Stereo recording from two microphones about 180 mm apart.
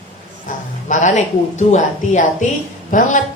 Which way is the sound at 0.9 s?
45° left (ahead or behind).